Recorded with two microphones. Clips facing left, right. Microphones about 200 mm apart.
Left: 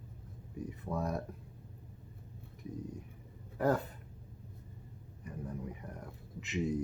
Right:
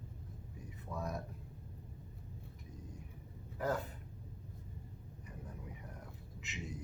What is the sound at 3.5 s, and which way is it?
Speech, 55° left (ahead or behind).